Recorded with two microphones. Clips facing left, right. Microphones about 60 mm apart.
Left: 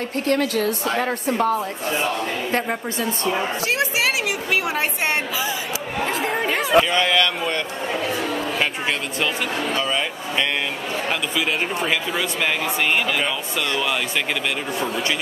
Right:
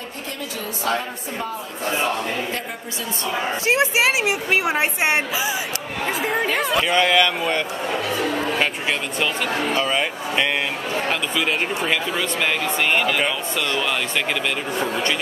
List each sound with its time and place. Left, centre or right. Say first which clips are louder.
0.3 s a woman's voice: left 11 dB; left
1.9 s speech: right 2 dB; centre
3.6 s a woman's voice: right 6 dB; right; by 6.4 s centre
6.4 s speech: right 1 dB; centre
6.9 s speech: right 2 dB; centre
9.6 s speech: right 3 dB; right
9.8 s speech: right 2 dB; centre
11.1 s speech: even; centre
14.8 s speech: right 2 dB; centre